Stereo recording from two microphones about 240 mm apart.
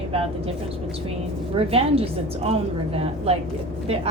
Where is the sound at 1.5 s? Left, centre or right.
Right.